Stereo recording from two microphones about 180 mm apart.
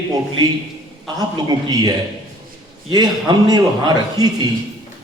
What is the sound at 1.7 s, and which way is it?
A man's voice, 20° right (ahead or behind).